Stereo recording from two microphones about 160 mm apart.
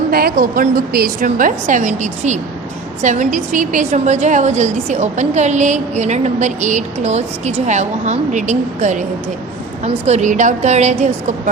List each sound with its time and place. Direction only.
0.1 s a woman's voice: 70° right (ahead or behind); by 11.1 s 45° right (ahead or behind)